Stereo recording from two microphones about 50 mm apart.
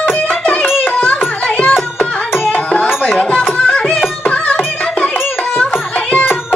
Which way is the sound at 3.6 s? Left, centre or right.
Centre.